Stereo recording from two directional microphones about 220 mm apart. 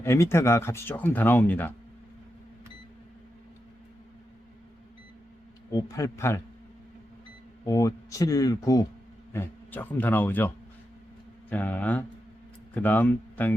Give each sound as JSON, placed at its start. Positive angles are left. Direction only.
{"t": 0.0, "sound": "speech", "side_deg": 10}
{"t": 5.7, "sound": "speech", "side_deg": 15}
{"t": 7.6, "sound": "speech", "side_deg": 15}